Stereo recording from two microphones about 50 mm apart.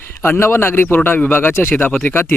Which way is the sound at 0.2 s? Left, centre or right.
Left.